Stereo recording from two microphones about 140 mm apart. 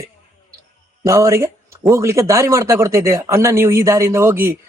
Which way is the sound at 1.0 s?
20° right (ahead or behind).